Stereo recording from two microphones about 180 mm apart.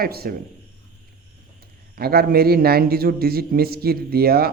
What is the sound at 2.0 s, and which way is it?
A man's voice, 60° right (ahead or behind).